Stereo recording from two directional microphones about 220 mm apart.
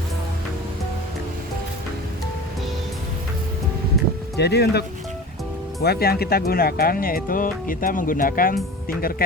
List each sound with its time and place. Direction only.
4.4 s speech: 50° left (ahead or behind)